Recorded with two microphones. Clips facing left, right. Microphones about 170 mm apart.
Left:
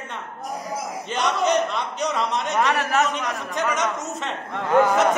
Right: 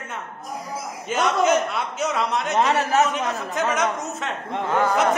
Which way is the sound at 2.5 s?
25° right (ahead or behind).